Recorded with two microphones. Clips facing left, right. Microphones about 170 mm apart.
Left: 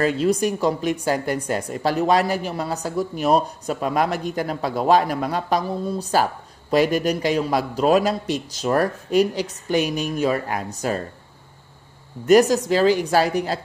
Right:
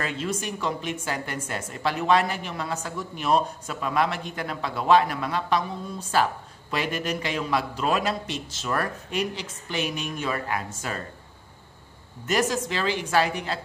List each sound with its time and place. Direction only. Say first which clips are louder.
0.0 s a woman's voice: left 10 dB; 40° left (ahead or behind)
12.3 s a woman's voice: left 10 dB; 40° left (ahead or behind)